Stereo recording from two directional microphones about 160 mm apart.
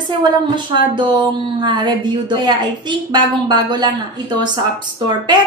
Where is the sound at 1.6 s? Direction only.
30° right (ahead or behind).